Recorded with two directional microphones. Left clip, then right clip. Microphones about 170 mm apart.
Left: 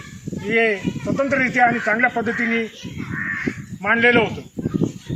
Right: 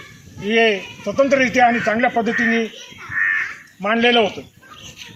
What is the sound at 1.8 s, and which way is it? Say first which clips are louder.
Speech: right 1 dB; 35° right (ahead or behind).